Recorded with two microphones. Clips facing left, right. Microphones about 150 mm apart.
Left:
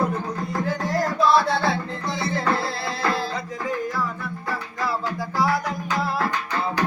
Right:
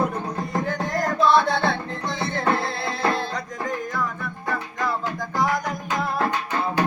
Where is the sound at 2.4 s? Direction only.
20° right (ahead or behind).